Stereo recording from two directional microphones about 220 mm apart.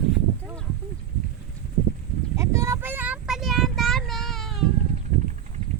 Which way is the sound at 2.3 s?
15° right (ahead or behind).